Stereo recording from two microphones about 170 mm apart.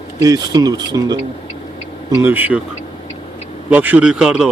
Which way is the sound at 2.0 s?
10° right (ahead or behind).